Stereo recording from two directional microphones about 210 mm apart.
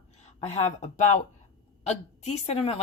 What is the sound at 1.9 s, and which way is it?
Speech, 30° left (ahead or behind).